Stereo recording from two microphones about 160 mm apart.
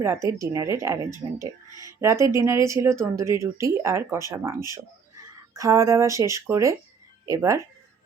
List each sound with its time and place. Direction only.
0.0 s speech: 15° right (ahead or behind)
5.5 s speech: 20° right (ahead or behind)